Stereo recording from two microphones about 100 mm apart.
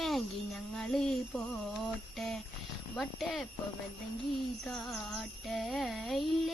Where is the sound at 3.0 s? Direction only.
Centre (ahead or behind).